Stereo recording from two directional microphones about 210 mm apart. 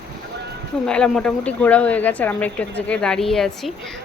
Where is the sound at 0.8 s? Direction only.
5° left (ahead or behind).